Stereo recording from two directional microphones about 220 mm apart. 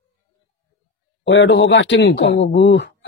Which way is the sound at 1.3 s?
55° left (ahead or behind).